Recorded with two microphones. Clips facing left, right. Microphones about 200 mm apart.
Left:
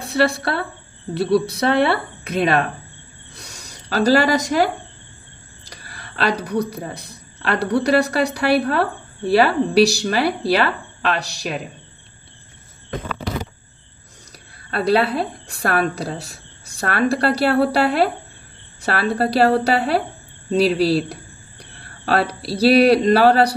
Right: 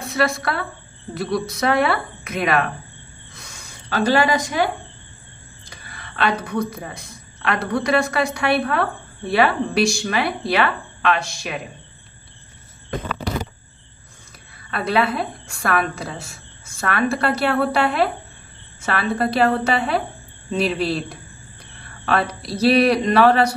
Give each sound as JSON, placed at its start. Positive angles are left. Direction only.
{"t": 0.0, "sound": "speech", "side_deg": 35}
{"t": 3.3, "sound": "a sound", "side_deg": 35}
{"t": 5.7, "sound": "speech", "side_deg": 40}
{"t": 14.7, "sound": "speech", "side_deg": 35}